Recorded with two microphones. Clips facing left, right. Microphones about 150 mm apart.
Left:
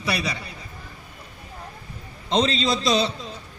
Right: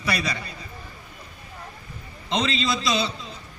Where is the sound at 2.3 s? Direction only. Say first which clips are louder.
Left 3 dB; 35° left (ahead or behind).